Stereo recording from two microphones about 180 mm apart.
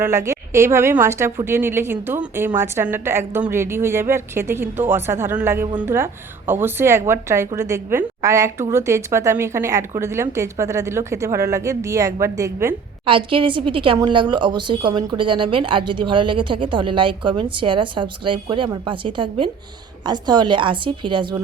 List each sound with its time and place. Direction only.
0.0 s a woman's voice: 15° right (ahead or behind)
13.1 s speech: 30° right (ahead or behind)